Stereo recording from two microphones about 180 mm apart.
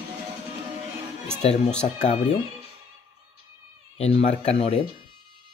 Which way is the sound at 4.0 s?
35° left (ahead or behind).